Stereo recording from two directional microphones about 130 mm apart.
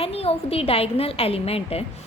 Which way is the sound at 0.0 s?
50° left (ahead or behind).